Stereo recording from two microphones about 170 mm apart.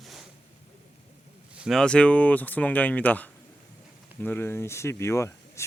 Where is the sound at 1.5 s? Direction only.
Centre (ahead or behind).